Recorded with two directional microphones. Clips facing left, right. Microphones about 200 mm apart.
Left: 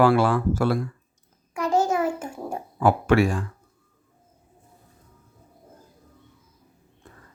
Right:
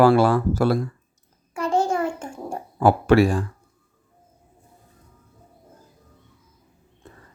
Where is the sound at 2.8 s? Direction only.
35° right (ahead or behind).